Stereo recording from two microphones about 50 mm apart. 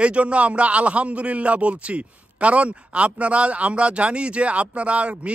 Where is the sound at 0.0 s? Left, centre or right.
Right.